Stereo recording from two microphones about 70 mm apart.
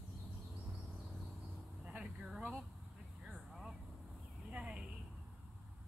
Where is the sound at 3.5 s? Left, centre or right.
Centre.